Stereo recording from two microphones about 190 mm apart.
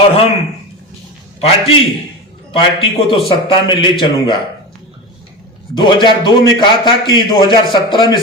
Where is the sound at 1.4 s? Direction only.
30° left (ahead or behind).